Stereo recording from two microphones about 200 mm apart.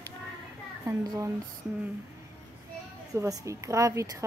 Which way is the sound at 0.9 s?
15° right (ahead or behind).